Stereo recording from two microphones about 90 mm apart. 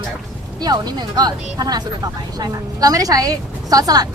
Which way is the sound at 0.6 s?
50° right (ahead or behind).